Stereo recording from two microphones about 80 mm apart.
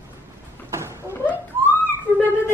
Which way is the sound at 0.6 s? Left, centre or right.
Right.